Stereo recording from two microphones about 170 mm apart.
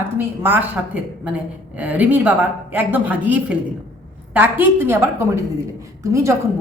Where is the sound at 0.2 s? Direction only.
10° right (ahead or behind).